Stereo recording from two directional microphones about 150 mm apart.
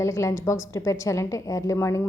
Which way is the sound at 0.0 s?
20° left (ahead or behind).